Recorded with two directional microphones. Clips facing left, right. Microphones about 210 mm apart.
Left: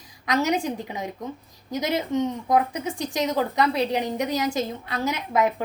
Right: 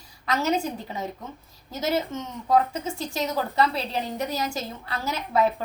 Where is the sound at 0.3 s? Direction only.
15° left (ahead or behind).